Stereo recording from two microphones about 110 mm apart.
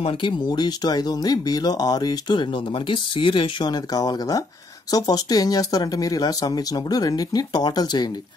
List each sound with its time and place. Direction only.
0.0 s speech: 55° left (ahead or behind)
0.5 s speech: 40° left (ahead or behind)